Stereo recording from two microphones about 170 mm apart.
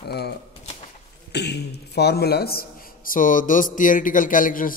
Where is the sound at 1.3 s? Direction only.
85° left; by 2.6 s 65° left (ahead or behind).